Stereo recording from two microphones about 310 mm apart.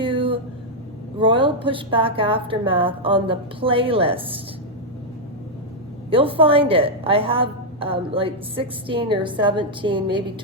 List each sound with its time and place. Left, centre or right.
0.0 s vehicle: centre
1.2 s a woman's voice: centre
6.1 s a woman's voice: centre